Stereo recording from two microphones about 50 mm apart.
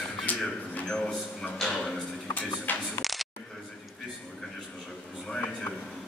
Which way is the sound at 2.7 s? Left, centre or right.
Left.